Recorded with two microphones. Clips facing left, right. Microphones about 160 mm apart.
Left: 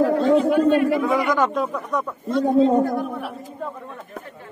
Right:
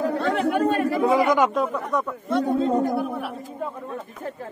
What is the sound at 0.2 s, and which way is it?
Chatter, 70° right (ahead or behind).